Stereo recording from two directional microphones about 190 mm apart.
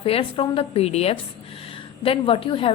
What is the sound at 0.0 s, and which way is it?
A woman's voice, 30° left (ahead or behind).